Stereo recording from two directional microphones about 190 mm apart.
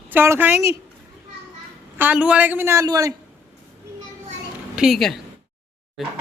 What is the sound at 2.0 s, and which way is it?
A woman's voice, 10° right (ahead or behind).